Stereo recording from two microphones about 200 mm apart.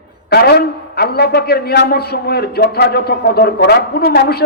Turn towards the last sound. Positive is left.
turn(degrees=50)  # may be behind; listen again after turning